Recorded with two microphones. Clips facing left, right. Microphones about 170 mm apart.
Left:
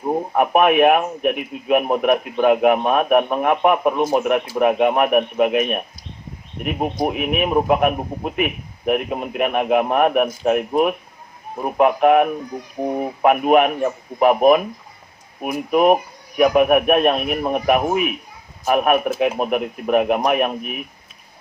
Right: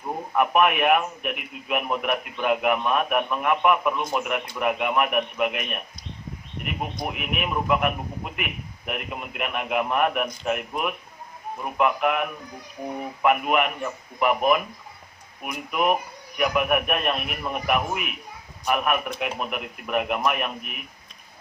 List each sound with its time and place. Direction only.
0.0 s a man's voice: 45° left (ahead or behind)
15.7 s a man's voice: 45° left (ahead or behind)